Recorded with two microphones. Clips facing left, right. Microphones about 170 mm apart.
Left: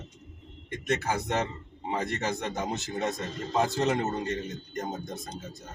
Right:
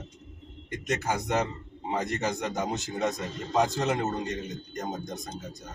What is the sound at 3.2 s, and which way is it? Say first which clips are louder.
A man's voice: right 1 dB; 20° right (ahead or behind).